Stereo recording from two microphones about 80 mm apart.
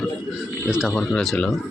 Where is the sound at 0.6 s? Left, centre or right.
Centre.